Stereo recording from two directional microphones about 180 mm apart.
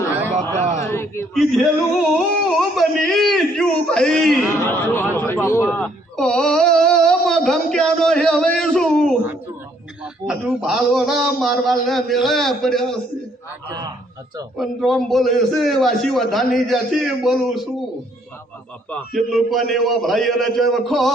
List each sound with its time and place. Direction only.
0.6 s a sound: 40° right (ahead or behind)
0.9 s a man's voice: 15° left (ahead or behind)
1.3 s a man's voice: centre (ahead or behind)
14.5 s a man's voice: centre (ahead or behind)
18.9 s a man's voice: 5° left (ahead or behind)